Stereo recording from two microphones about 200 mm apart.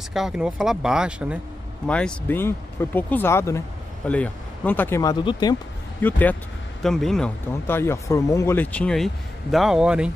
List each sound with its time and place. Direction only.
0.1 s speech: centre (ahead or behind)
1.9 s speech: 5° left (ahead or behind); by 5.6 s 20° left (ahead or behind)
5.9 s speech: 10° left (ahead or behind)